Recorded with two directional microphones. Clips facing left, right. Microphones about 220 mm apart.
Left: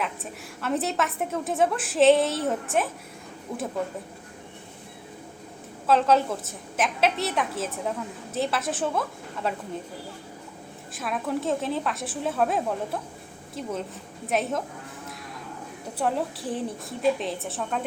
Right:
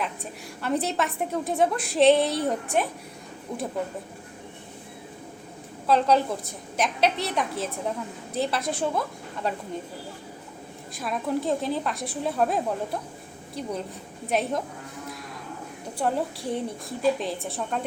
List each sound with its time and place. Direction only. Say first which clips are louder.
0.0 s a woman's voice: even; centre (ahead or behind)
5.9 s a woman's voice: even; centre (ahead or behind)
10.9 s a woman's voice: right 1 dB; centre (ahead or behind)
16.0 s a woman's voice: even; centre (ahead or behind)